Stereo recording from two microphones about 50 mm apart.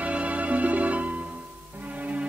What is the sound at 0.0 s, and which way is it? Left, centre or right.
Music, right.